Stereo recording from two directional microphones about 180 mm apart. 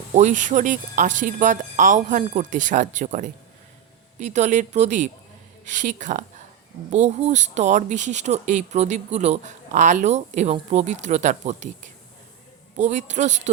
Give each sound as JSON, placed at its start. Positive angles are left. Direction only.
{"t": 0.1, "sound": "speech", "side_deg": -40}